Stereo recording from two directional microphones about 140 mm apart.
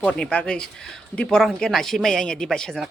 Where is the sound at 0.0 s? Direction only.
10° left (ahead or behind).